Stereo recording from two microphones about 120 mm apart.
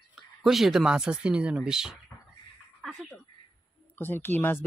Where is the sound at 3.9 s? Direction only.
15° left (ahead or behind).